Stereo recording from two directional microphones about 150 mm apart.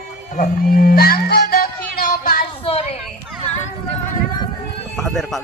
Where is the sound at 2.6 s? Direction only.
40° left (ahead or behind).